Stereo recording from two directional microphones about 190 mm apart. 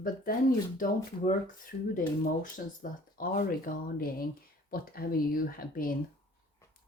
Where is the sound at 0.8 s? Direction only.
45° left (ahead or behind).